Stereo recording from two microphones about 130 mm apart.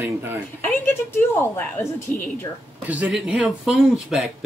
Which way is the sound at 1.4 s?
15° left (ahead or behind).